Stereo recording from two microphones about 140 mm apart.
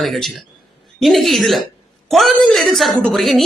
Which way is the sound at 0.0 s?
Centre (ahead or behind).